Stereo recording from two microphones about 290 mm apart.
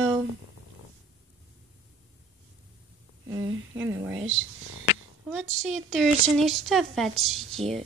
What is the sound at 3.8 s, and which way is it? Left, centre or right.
Speech, centre.